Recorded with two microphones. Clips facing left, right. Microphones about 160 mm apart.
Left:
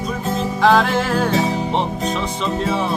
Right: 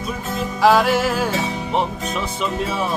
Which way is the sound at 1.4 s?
35° left (ahead or behind).